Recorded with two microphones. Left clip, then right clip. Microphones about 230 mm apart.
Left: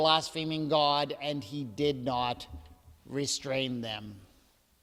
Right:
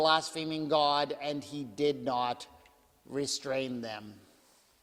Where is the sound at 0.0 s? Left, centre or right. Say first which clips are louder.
Left 1 dB; left.